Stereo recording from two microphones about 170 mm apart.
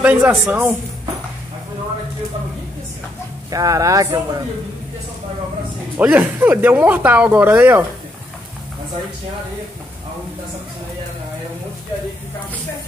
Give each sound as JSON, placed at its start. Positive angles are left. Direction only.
{"t": 0.0, "sound": "speech", "side_deg": -10}
{"t": 3.4, "sound": "speech", "side_deg": -20}
{"t": 5.9, "sound": "speech", "side_deg": -10}